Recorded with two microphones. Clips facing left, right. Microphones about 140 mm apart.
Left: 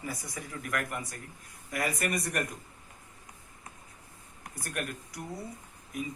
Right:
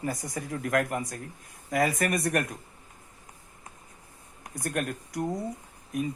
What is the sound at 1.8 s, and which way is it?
Speech, 65° right (ahead or behind).